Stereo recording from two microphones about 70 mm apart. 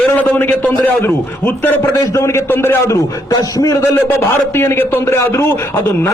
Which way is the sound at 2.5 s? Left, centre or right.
Left.